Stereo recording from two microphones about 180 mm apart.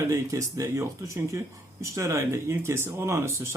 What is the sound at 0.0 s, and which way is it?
Speech, 15° right (ahead or behind).